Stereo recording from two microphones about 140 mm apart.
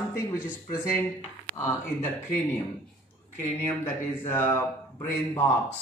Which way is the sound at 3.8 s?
15° left (ahead or behind).